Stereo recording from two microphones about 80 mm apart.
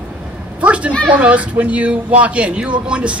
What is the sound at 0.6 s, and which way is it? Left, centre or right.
Speech, centre.